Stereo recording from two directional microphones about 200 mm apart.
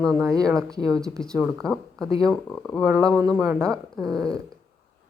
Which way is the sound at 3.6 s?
5° left (ahead or behind).